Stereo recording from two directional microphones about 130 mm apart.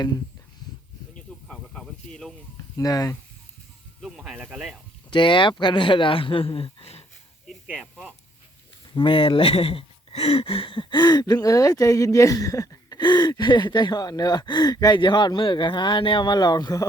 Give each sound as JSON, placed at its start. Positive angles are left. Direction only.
{"t": 1.1, "sound": "a sound", "side_deg": 5}
{"t": 2.7, "sound": "speech", "side_deg": 30}
{"t": 4.0, "sound": "speech", "side_deg": 0}
{"t": 5.1, "sound": "speech", "side_deg": 40}
{"t": 7.4, "sound": "snake", "side_deg": -5}
{"t": 9.0, "sound": "speech", "side_deg": 40}